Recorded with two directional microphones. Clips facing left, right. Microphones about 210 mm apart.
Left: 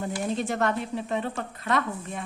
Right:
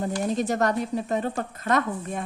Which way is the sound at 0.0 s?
40° right (ahead or behind).